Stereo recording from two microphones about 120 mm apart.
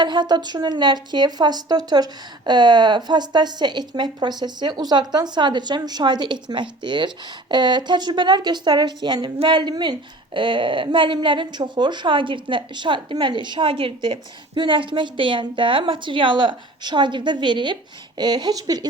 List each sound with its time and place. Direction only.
0.0 s a woman's voice: 40° right (ahead or behind)